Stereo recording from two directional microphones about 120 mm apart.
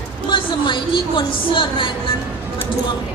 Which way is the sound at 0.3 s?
40° left (ahead or behind).